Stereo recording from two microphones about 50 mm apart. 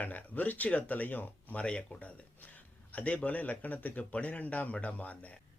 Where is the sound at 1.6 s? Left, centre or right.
Left.